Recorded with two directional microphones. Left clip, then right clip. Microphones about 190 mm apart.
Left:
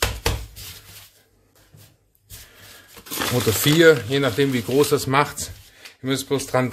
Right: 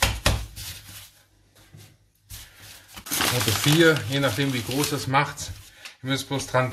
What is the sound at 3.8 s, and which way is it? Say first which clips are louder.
Speech: left 6 dB; 50° left (ahead or behind).